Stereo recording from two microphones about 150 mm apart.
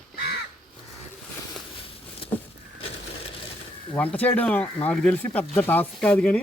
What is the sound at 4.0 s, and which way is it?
Speech, 10° left (ahead or behind).